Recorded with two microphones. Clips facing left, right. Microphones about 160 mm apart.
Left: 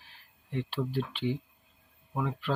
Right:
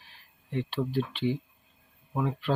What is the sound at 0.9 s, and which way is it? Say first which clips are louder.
Speech: right 3 dB; centre (ahead or behind).